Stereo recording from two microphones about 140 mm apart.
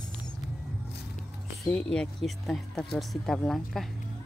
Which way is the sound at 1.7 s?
5° left (ahead or behind).